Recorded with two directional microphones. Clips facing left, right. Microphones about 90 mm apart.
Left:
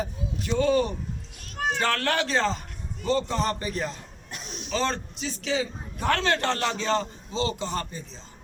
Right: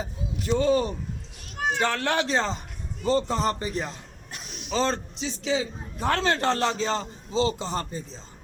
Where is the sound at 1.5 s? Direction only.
10° right (ahead or behind); by 8.0 s 30° right (ahead or behind).